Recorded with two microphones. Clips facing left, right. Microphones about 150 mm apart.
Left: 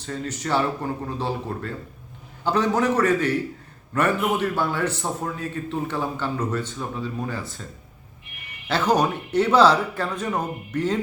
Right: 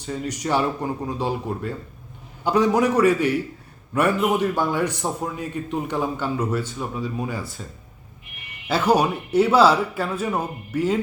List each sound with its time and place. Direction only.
0.0 s a man's voice: 10° right (ahead or behind)
8.6 s a man's voice: 10° right (ahead or behind)